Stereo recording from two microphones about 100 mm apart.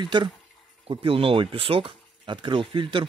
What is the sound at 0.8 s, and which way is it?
Speech, 60° right (ahead or behind).